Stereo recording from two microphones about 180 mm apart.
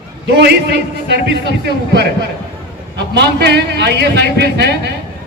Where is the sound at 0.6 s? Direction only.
70° right (ahead or behind).